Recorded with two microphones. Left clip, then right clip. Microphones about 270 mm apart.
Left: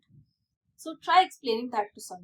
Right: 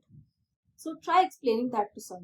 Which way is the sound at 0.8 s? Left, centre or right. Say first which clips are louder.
Left 2 dB; left.